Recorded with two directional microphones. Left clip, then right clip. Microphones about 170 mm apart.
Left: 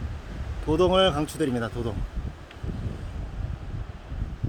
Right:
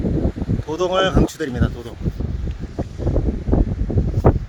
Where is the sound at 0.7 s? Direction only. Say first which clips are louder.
Right 2 dB; 10° left (ahead or behind).